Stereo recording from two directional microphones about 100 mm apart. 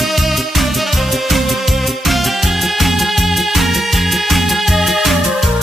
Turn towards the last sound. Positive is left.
turn(degrees=0)  # may be behind; listen again after turning